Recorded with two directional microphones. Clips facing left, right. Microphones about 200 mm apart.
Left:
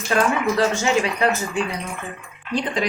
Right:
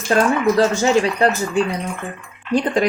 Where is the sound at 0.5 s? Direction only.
35° right (ahead or behind).